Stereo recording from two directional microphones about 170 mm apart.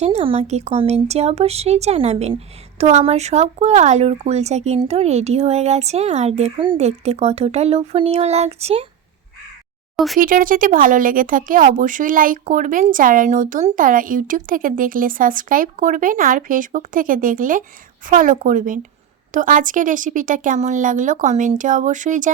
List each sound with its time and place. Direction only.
0.0 s a woman's voice: 40° right (ahead or behind)
10.2 s speech: 55° right (ahead or behind)